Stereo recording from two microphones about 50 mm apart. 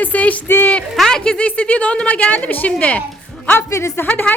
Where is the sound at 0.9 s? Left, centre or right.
Centre.